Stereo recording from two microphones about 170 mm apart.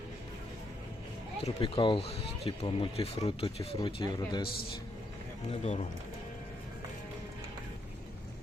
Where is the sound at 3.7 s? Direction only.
25° left (ahead or behind).